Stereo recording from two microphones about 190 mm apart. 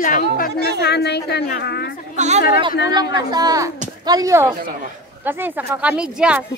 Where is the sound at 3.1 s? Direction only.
20° right (ahead or behind); by 6.5 s 5° right (ahead or behind).